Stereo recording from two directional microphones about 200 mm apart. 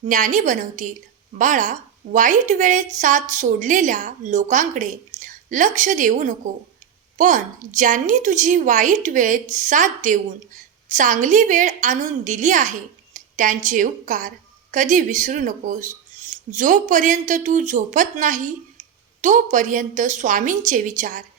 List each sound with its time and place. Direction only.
0.1 s a woman's voice: 40° right (ahead or behind)